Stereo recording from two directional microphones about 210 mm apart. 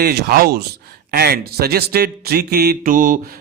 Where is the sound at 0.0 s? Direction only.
50° right (ahead or behind).